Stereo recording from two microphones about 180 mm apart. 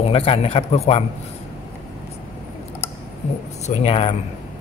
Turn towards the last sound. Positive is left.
turn(degrees=35)  # may be behind; listen again after turning